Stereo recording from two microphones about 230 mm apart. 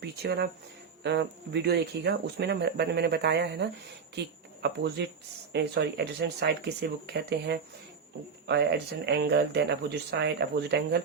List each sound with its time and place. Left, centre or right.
0.0 s speech: right